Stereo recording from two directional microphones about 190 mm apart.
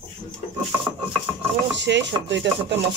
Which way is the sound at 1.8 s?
65° right (ahead or behind).